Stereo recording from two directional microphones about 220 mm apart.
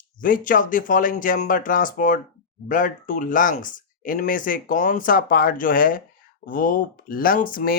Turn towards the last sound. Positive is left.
turn(degrees=40)  # may be behind; listen again after turning